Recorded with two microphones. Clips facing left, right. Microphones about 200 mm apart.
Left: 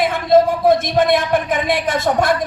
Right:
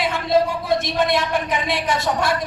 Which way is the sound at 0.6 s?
50° left (ahead or behind).